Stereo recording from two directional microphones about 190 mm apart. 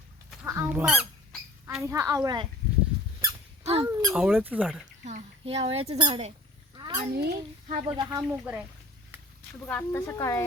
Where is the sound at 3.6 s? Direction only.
30° right (ahead or behind).